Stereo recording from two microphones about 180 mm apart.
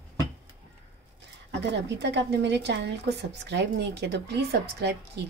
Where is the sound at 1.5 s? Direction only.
75° right (ahead or behind).